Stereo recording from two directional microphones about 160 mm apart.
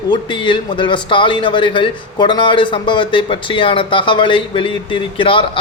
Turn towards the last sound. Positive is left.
turn(degrees=35)  # may be behind; listen again after turning